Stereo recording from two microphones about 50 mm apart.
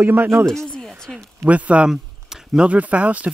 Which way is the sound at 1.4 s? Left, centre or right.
Right.